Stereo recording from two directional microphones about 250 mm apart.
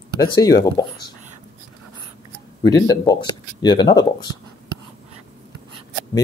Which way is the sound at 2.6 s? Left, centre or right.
Centre.